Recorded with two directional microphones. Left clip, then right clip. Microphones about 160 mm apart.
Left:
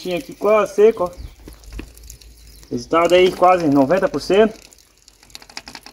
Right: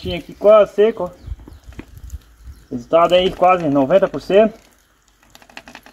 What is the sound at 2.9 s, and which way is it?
Speech, 40° right (ahead or behind).